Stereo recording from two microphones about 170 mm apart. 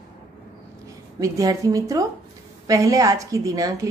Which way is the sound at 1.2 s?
20° right (ahead or behind).